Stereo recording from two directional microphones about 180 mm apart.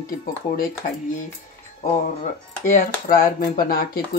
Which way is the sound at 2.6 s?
45° left (ahead or behind).